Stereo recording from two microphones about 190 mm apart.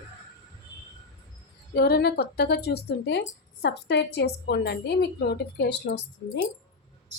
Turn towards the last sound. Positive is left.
turn(degrees=60)  # may be behind; listen again after turning